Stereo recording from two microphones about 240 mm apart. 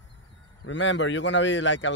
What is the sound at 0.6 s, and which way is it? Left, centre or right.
Speech, left.